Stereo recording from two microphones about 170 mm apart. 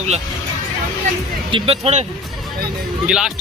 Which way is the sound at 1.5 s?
35° right (ahead or behind).